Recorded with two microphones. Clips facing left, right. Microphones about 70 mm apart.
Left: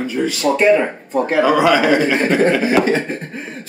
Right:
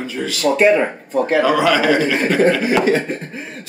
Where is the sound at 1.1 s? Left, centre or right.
Centre.